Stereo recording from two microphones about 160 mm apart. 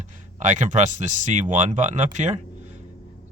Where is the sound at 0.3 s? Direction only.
50° right (ahead or behind).